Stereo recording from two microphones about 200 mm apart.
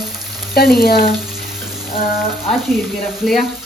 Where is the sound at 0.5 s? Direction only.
50° left (ahead or behind).